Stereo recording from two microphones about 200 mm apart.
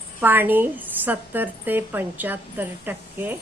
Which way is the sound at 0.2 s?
10° right (ahead or behind).